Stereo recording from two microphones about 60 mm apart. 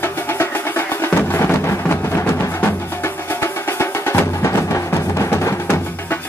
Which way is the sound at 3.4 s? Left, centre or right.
Left.